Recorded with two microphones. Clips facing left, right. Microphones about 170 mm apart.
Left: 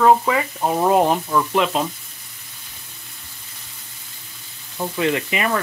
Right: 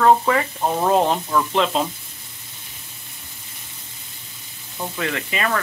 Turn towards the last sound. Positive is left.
turn(degrees=20)  # may be behind; listen again after turning